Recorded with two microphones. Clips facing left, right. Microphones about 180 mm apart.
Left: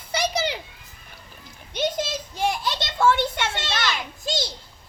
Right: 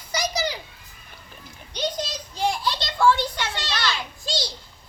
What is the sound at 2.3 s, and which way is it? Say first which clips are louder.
Children playing: right 1 dB; 20° left (ahead or behind).